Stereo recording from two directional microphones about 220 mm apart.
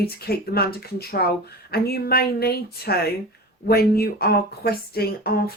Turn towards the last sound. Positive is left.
turn(degrees=45)  # may be behind; listen again after turning